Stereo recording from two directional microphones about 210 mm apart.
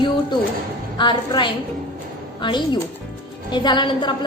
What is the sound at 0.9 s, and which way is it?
A woman's voice, 20° left (ahead or behind).